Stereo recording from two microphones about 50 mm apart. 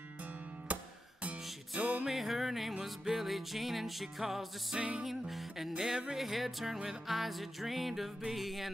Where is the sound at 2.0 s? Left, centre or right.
Centre.